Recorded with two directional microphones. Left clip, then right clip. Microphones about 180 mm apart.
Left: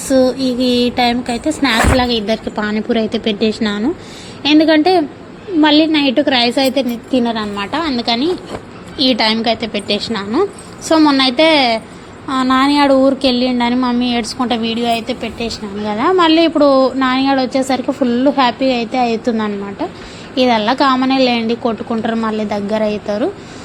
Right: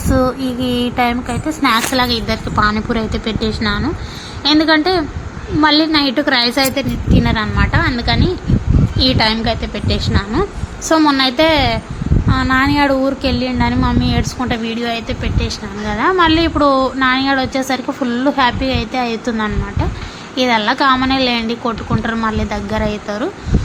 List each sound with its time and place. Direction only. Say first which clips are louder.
0.1 s speech: left 3 dB; 10° left (ahead or behind)